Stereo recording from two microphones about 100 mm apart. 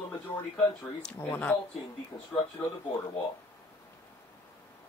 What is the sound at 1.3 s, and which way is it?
Speech, 20° left (ahead or behind).